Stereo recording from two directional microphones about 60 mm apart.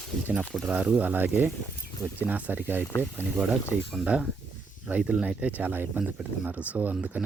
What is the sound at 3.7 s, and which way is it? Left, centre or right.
Speech, centre.